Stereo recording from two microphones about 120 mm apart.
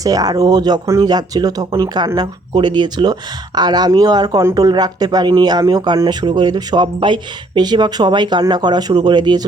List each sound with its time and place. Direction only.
0.0 s speech: 30° right (ahead or behind)